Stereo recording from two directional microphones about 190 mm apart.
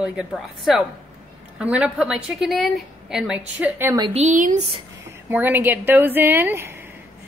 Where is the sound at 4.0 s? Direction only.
35° right (ahead or behind).